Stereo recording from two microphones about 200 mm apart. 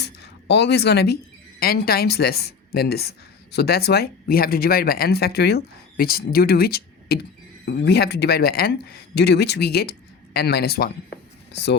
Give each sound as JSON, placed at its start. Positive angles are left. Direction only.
{"t": 0.0, "sound": "speech", "side_deg": 55}